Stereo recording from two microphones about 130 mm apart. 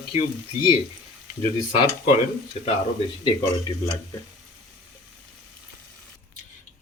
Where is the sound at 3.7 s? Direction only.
40° left (ahead or behind).